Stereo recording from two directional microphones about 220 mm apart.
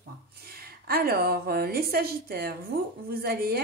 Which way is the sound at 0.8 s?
45° right (ahead or behind).